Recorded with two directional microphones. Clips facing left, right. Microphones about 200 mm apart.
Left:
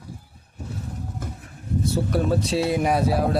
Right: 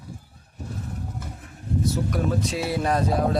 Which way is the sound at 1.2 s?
50° left (ahead or behind).